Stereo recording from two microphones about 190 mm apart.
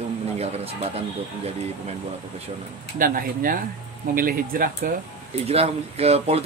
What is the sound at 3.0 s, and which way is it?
Speech, 45° right (ahead or behind).